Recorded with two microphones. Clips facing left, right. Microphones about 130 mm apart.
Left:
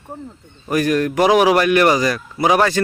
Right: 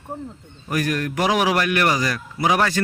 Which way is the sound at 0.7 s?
20° left (ahead or behind).